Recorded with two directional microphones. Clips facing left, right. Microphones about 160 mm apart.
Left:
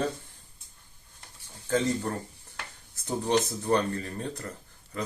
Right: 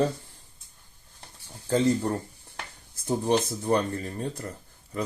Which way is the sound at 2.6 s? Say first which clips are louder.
Right 2 dB; 20° right (ahead or behind).